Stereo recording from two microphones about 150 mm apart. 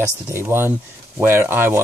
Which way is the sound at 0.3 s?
15° right (ahead or behind).